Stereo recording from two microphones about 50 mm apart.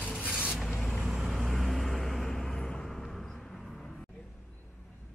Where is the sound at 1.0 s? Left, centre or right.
Centre.